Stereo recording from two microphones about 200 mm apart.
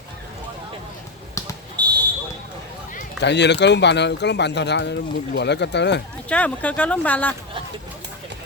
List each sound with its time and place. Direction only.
1.4 s basketball bounce: 15° left (ahead or behind)
3.2 s speech: 60° left (ahead or behind)
6.2 s speech: 5° left (ahead or behind)